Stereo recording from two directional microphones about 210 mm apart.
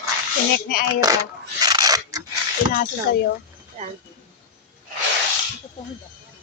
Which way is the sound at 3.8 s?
30° right (ahead or behind).